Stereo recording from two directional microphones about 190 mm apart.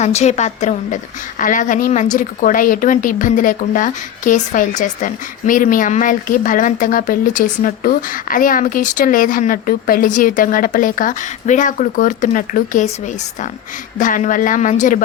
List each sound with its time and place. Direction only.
0.0 s a woman's voice: 35° left (ahead or behind)
14.0 s a woman's voice: 45° left (ahead or behind)